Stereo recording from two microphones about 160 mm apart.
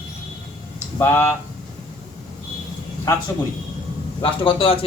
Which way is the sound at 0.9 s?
15° left (ahead or behind).